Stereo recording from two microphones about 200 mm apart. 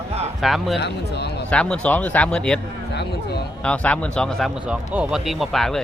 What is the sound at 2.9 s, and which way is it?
Speech, 55° left (ahead or behind).